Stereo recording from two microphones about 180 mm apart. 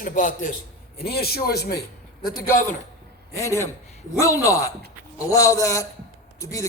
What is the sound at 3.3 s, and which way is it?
A man's voice, 15° left (ahead or behind).